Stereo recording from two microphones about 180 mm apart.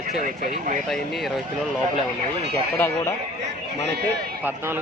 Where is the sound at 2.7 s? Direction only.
10° left (ahead or behind).